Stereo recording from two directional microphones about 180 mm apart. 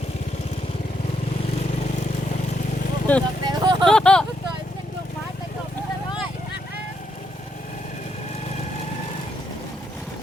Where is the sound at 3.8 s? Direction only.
5° left (ahead or behind).